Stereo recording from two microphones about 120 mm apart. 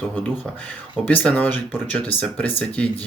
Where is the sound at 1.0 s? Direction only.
15° left (ahead or behind).